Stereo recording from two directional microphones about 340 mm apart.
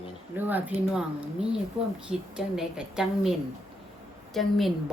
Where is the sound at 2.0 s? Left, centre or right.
Centre.